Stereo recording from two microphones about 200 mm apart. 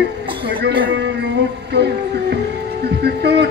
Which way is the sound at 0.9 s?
60° right (ahead or behind).